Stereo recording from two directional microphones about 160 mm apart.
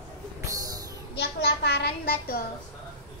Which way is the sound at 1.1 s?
90° left.